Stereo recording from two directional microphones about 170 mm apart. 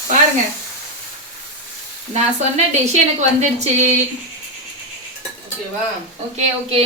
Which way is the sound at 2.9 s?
40° right (ahead or behind).